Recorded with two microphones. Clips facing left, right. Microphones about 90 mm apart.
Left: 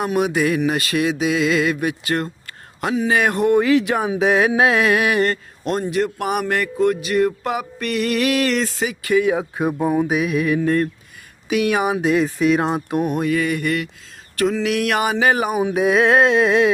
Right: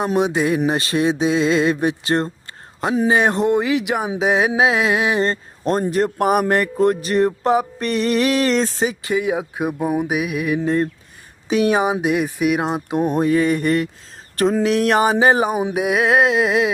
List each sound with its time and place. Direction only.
0.0 s speech: 25° right (ahead or behind)
2.9 s a sound: 30° right (ahead or behind)
9.1 s speech: 20° right (ahead or behind)
9.4 s mantra: 5° right (ahead or behind)
11.4 s speech: 30° right (ahead or behind)
14.3 s a sound: 35° right (ahead or behind)
15.7 s mantra: 10° right (ahead or behind)